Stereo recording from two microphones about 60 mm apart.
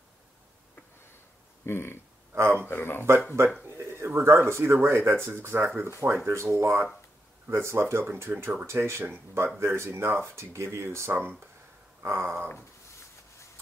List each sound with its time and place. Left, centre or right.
1.7 s speech: left
2.3 s speech: right
2.7 s speech: left
3.7 s speech: right
11.1 s speech: right
12.0 s speech: right